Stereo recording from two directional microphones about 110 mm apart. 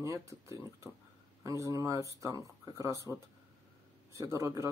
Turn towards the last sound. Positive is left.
turn(degrees=-30)  # may be behind; listen again after turning